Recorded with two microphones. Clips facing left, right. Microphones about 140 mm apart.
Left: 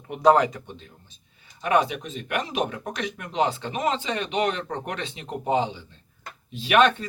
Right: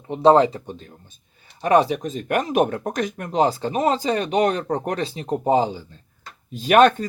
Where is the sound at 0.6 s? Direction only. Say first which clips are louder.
Right 6 dB; 45° right (ahead or behind).